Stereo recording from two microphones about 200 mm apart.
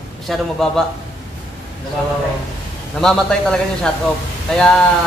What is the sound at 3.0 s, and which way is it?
Speech, 5° left (ahead or behind).